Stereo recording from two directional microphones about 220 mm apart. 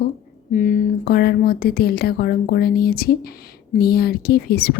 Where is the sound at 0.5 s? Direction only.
35° left (ahead or behind).